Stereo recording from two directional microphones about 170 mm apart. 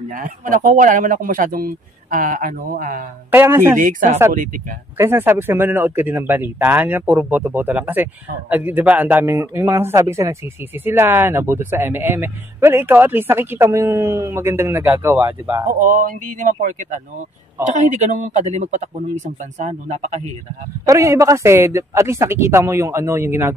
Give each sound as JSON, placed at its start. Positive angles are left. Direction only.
{"t": 0.1, "sound": "speech", "side_deg": -50}
{"t": 3.3, "sound": "speech", "side_deg": -15}
{"t": 3.8, "sound": "speech", "side_deg": -50}
{"t": 4.9, "sound": "speech", "side_deg": -15}
{"t": 15.8, "sound": "speech", "side_deg": -50}
{"t": 20.8, "sound": "speech", "side_deg": -20}